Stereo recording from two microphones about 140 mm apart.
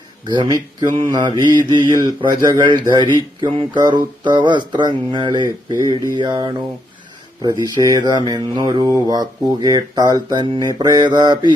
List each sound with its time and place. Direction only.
0.3 s speech: 30° right (ahead or behind)